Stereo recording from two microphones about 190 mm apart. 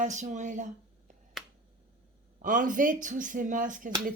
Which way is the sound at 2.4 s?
45° right (ahead or behind).